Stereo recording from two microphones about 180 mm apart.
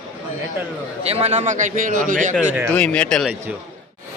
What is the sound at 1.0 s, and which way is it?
A man's voice, 35° right (ahead or behind).